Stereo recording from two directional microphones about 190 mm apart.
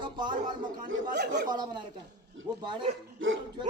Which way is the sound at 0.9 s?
60° right (ahead or behind).